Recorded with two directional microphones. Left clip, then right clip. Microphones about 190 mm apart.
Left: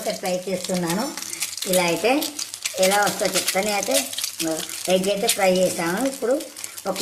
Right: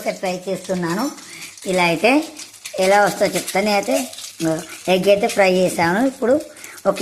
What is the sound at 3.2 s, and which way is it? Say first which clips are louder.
Speech: right 3 dB; 45° right (ahead or behind).